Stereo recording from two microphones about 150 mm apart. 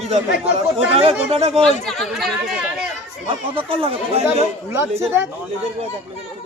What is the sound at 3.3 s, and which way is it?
Speech, 40° right (ahead or behind).